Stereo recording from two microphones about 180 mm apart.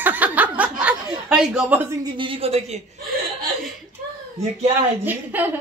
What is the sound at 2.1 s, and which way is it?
Speech, 30° right (ahead or behind).